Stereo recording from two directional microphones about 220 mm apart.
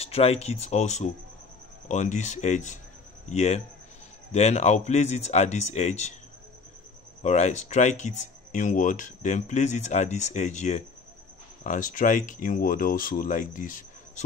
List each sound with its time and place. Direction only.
0.0 s speech: 25° left (ahead or behind)
7.2 s speech: 30° left (ahead or behind)